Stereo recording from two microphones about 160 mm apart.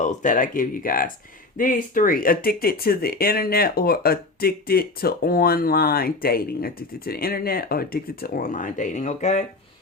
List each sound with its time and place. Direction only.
0.0 s speech: 50° left (ahead or behind)